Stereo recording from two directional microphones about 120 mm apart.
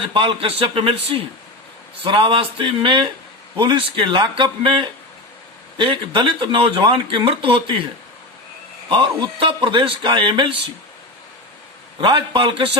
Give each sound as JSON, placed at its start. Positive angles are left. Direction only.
{"t": 0.1, "sound": "speech", "side_deg": -45}
{"t": 8.9, "sound": "speech", "side_deg": -40}
{"t": 11.9, "sound": "speech", "side_deg": -45}